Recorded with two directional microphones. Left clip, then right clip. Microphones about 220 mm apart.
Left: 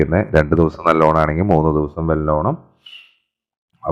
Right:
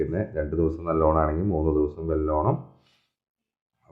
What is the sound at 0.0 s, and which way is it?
Speech, 45° left (ahead or behind).